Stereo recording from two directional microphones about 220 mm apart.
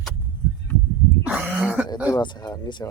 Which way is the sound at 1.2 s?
5° right (ahead or behind).